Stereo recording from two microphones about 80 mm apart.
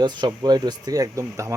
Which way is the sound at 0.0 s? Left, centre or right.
Right.